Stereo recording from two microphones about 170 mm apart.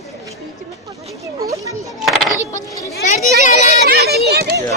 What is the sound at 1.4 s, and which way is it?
Children playing, 20° right (ahead or behind).